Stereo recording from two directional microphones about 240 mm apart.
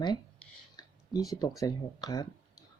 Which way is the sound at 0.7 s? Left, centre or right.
Centre.